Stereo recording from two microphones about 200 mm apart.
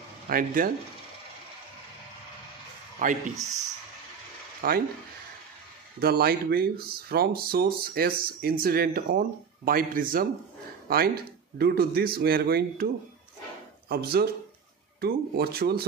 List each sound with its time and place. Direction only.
0.3 s speech: 45° right (ahead or behind)
3.0 s speech: 40° right (ahead or behind)
4.6 s speech: 50° right (ahead or behind)
5.9 s speech: 50° right (ahead or behind)